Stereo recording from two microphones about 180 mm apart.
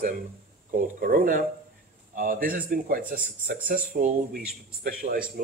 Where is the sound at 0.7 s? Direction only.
50° right (ahead or behind).